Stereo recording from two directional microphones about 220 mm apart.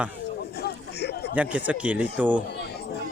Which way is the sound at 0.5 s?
50° left (ahead or behind).